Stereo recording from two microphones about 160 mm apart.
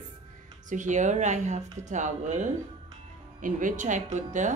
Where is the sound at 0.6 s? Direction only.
50° right (ahead or behind).